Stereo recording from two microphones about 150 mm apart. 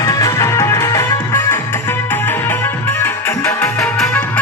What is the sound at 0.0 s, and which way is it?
Music, 25° left (ahead or behind).